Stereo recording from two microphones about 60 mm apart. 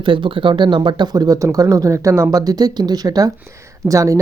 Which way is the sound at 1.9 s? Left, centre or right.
Right.